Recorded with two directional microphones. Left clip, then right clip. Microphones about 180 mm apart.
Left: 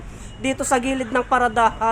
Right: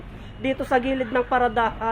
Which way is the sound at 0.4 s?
15° left (ahead or behind).